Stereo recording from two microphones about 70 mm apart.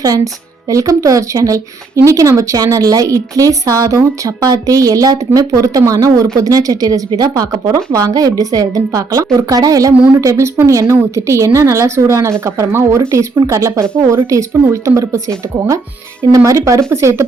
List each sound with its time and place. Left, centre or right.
0.7 s a woman's voice: right
4.4 s a woman's voice: right
10.2 s a woman's voice: right
16.4 s a woman's voice: right